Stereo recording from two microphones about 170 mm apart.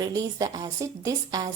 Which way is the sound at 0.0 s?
20° right (ahead or behind).